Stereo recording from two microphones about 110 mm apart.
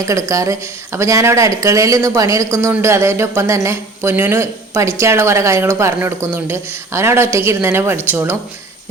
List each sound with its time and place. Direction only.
0.0 s speech: 30° right (ahead or behind)